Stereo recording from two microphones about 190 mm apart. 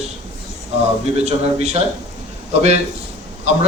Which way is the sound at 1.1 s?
35° right (ahead or behind).